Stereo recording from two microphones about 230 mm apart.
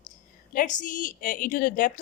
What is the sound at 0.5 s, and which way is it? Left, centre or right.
Speech, left.